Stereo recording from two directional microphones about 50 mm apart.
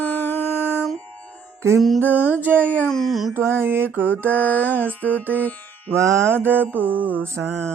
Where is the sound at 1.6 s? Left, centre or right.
Right.